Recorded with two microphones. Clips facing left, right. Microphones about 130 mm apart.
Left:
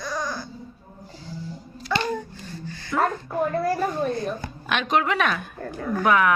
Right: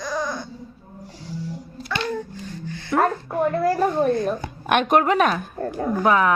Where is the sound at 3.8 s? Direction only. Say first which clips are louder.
Right 5 dB; 40° right (ahead or behind).